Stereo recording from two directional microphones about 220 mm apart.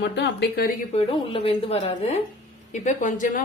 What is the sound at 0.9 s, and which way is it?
A woman's voice, 25° left (ahead or behind).